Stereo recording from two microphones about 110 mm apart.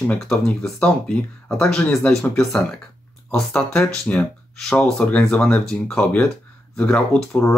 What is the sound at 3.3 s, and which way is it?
Speech, 10° left (ahead or behind).